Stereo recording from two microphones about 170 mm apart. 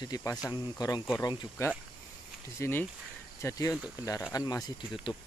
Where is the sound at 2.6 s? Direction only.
15° left (ahead or behind).